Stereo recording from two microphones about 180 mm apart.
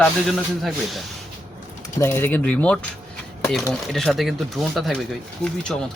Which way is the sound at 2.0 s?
15° left (ahead or behind).